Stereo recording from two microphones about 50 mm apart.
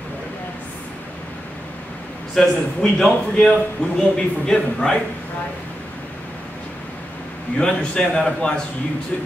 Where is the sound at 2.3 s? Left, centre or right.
Centre.